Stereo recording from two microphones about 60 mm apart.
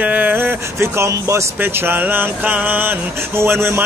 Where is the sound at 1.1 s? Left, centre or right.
Right.